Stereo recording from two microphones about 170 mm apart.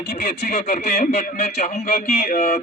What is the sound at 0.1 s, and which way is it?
Speech, 55° left (ahead or behind).